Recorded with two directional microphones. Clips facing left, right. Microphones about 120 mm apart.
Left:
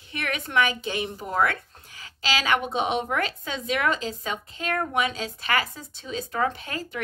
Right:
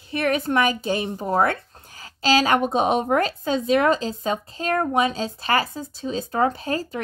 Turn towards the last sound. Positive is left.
turn(degrees=-35)  # may be behind; listen again after turning